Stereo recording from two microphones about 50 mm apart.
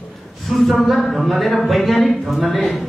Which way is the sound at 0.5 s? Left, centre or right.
Centre.